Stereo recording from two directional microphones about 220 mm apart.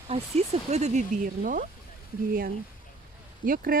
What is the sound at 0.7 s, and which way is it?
Speech, 30° right (ahead or behind).